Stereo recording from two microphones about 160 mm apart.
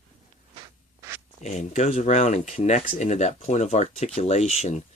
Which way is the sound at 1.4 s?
45° left (ahead or behind).